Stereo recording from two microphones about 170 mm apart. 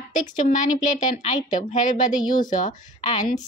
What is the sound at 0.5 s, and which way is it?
A woman's voice, 45° left (ahead or behind).